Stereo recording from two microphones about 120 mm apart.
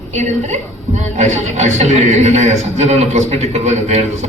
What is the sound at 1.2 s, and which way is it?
Speech, 75° right (ahead or behind).